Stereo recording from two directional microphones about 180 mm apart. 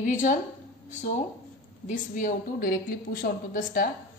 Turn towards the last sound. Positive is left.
turn(degrees=55)  # may be behind; listen again after turning